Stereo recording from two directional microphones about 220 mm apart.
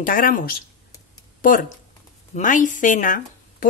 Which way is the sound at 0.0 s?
40° left (ahead or behind).